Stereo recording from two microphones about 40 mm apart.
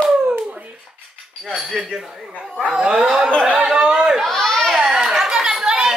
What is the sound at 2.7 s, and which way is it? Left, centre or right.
Speech, centre.